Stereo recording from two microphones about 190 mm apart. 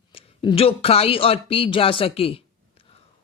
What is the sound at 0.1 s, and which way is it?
A man's voice, 30° left (ahead or behind).